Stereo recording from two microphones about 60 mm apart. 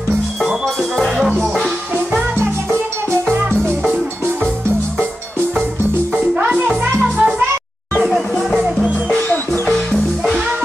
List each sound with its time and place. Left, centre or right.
0.9 s music: centre
6.3 s music: right
8.0 s music: centre
9.5 s music: centre
9.9 s music: centre